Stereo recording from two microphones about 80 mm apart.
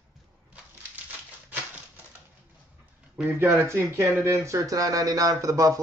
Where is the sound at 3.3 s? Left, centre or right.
Right.